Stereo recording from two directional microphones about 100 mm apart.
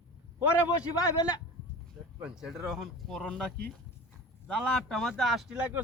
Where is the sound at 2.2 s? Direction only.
5° right (ahead or behind).